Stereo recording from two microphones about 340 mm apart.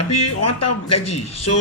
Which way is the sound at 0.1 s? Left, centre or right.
Left.